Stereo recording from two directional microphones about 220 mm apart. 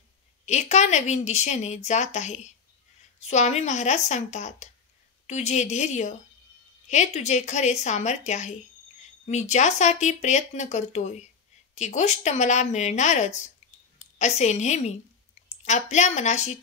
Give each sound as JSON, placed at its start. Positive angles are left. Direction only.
{"t": 0.5, "sound": "a woman's voice", "side_deg": 30}